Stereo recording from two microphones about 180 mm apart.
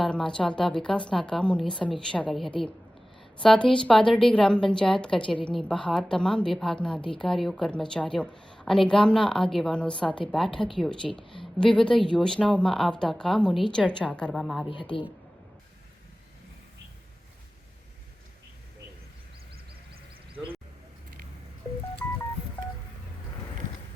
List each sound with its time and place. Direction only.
0.0 s a woman's voice: 5° left (ahead or behind)
14.7 s a man's voice: 25° left (ahead or behind)
22.0 s telephone dialing: 10° left (ahead or behind)